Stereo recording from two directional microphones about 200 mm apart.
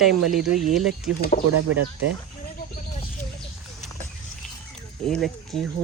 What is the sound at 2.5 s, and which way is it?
Wild animals, 50° left (ahead or behind).